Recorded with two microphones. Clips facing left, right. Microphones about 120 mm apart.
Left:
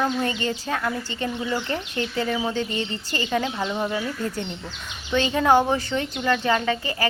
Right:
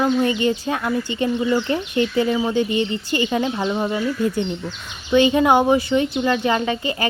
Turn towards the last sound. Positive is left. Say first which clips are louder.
# right 2 dB
turn(degrees=-20)  # may be behind; listen again after turning